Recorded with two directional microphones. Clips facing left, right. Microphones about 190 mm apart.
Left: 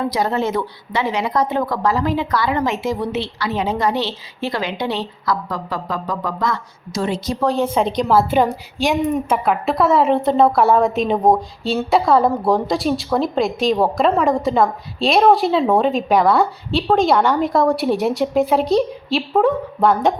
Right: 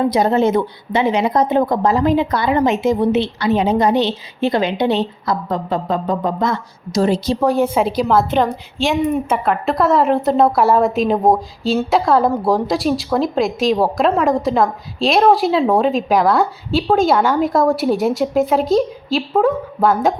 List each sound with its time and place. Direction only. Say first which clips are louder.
0.0 s speech: right 5 dB; 20° right (ahead or behind)
6.9 s speech: right 6 dB; 35° right (ahead or behind)
7.3 s a woman's voice: even; 15° right (ahead or behind)
7.7 s a woman's voice: right 1 dB; 5° right (ahead or behind)